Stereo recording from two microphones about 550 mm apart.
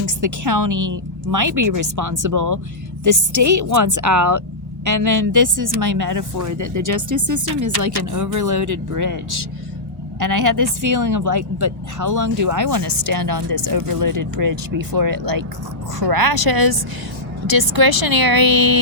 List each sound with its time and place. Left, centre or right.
0.0 s a woman's voice: right
10.2 s a woman's voice: right